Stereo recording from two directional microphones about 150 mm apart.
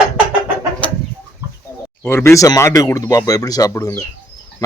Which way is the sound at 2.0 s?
15° left (ahead or behind).